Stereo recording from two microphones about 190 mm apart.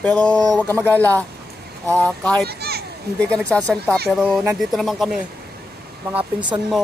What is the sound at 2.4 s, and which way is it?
Children playing, 55° right (ahead or behind).